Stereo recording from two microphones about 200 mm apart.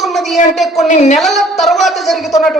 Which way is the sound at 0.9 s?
35° left (ahead or behind).